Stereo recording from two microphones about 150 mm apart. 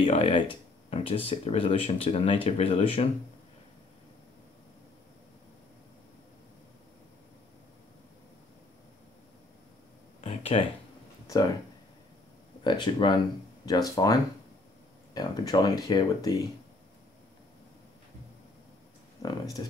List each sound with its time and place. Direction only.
0.0 s speech: 40° left (ahead or behind)
10.2 s a sound: 40° left (ahead or behind)
11.2 s speech: 25° left (ahead or behind)
12.6 s speech: 30° left (ahead or behind)
19.2 s speech: 20° left (ahead or behind)